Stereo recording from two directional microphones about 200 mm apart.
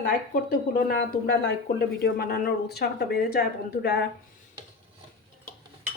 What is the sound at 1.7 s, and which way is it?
Speech, 50° left (ahead or behind).